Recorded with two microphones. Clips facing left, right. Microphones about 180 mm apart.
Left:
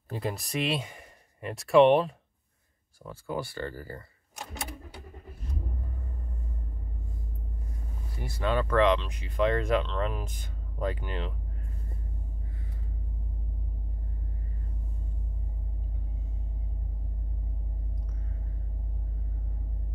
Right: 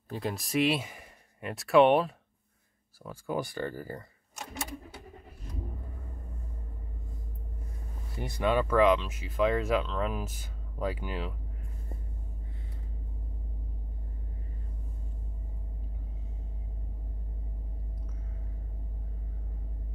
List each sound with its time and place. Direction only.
0.1 s speech: centre (ahead or behind)
3.1 s speech: 15° right (ahead or behind)
8.2 s speech: 15° right (ahead or behind)